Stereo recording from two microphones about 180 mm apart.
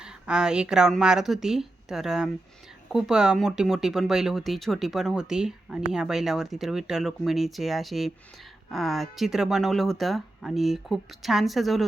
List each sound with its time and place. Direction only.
0.0 s speech: 5° right (ahead or behind)